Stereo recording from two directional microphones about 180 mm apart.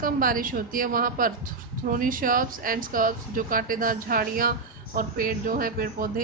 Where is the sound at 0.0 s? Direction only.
50° right (ahead or behind).